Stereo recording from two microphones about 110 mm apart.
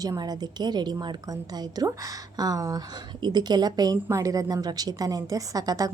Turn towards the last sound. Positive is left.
turn(degrees=-35)  # may be behind; listen again after turning